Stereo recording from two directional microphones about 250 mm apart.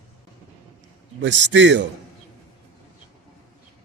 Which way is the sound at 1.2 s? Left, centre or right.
Right.